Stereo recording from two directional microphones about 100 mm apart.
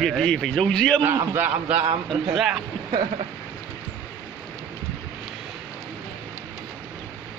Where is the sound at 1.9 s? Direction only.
90° right.